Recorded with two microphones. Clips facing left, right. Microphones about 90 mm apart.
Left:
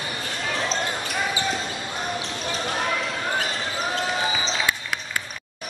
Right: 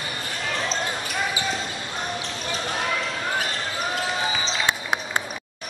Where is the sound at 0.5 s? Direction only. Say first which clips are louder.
Left 1 dB; centre (ahead or behind).